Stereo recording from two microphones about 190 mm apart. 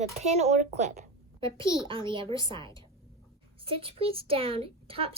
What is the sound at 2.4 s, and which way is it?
Speech, 20° left (ahead or behind).